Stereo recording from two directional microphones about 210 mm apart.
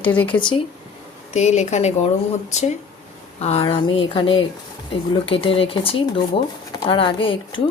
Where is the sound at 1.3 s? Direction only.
30° left (ahead or behind).